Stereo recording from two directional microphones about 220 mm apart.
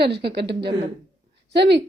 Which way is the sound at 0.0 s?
50° right (ahead or behind).